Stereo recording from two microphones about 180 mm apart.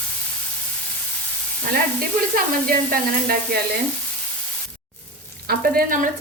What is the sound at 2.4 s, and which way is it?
Sizzle, 50° right (ahead or behind).